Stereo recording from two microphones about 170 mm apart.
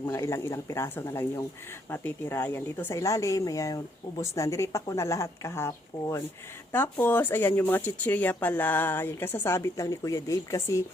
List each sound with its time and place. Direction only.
0.0 s a woman's voice: 15° left (ahead or behind)